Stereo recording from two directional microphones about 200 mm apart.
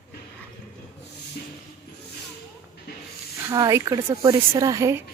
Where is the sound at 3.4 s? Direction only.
15° right (ahead or behind).